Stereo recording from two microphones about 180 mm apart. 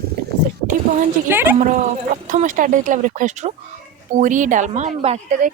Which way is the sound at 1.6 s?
45° right (ahead or behind).